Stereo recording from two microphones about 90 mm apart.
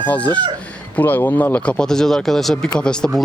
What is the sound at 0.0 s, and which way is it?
Speech, 20° left (ahead or behind).